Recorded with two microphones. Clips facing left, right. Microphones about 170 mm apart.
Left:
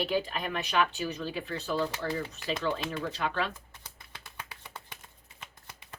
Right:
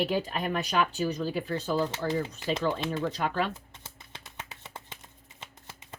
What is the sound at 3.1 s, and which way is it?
Speech, 40° right (ahead or behind).